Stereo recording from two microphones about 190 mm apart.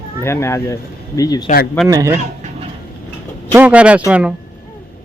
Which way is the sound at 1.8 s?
15° right (ahead or behind).